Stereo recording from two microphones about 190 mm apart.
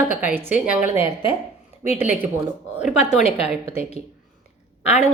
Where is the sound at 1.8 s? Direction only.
35° left (ahead or behind).